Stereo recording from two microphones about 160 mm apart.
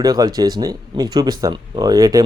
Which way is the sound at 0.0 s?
25° right (ahead or behind).